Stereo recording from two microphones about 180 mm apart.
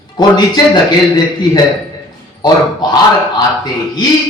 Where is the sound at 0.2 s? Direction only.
25° left (ahead or behind).